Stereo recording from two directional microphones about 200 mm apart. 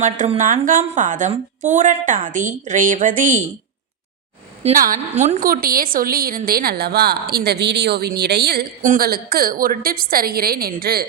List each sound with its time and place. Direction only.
0.0 s a woman's voice: 40° right (ahead or behind)
4.6 s a woman's voice: 45° right (ahead or behind)